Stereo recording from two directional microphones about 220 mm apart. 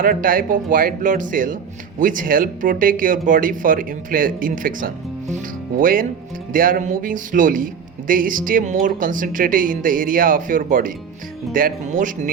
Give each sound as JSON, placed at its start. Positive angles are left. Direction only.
{"t": 0.0, "sound": "speech", "side_deg": -40}